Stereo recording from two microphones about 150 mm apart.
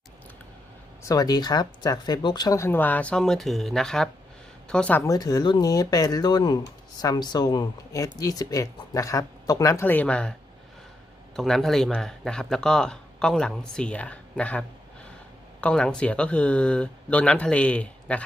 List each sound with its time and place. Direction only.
1.0 s speech: 25° left (ahead or behind); by 5.0 s 10° left (ahead or behind)
5.0 s speech: 25° left (ahead or behind); by 10.3 s 5° left (ahead or behind)
11.3 s speech: 5° left (ahead or behind)
15.6 s speech: 5° left (ahead or behind)